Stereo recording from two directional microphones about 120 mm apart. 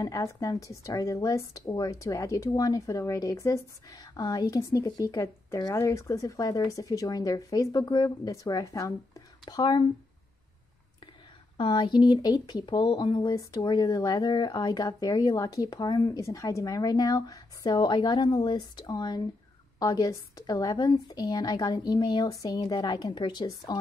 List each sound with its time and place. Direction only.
0.0 s speech: 25° left (ahead or behind)
9.4 s speech: 40° left (ahead or behind)
11.5 s speech: 40° left (ahead or behind)